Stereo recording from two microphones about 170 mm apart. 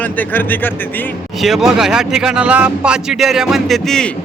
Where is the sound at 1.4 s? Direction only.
Centre (ahead or behind).